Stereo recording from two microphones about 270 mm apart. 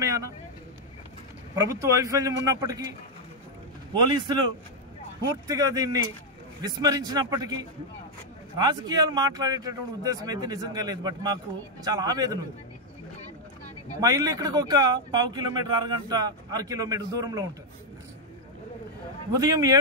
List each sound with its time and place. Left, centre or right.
0.0 s vehicle: centre
1.5 s speech: centre
3.9 s speech: centre
8.5 s speech: centre
13.9 s speech: centre
19.3 s speech: centre